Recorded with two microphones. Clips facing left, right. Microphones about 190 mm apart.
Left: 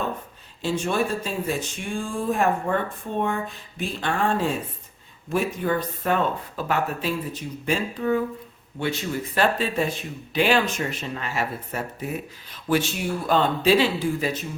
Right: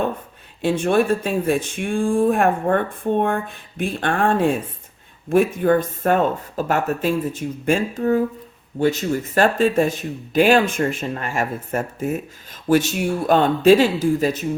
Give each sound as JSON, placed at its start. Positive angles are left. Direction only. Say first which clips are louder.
{"t": 0.6, "sound": "speech", "louder": "right 6 dB", "side_deg": -60}